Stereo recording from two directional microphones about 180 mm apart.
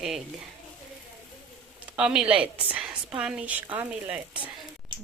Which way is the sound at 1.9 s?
5° right (ahead or behind).